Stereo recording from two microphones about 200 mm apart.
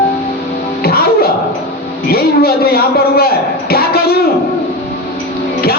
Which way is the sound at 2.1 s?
50° left (ahead or behind).